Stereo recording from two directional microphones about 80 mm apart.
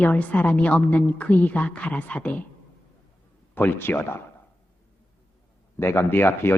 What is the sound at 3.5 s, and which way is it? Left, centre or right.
Speech, left.